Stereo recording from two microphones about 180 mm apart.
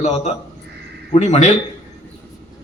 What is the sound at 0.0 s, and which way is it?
A man's voice, 40° left (ahead or behind).